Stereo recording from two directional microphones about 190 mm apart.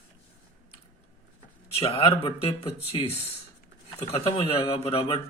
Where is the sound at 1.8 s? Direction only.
30° left (ahead or behind).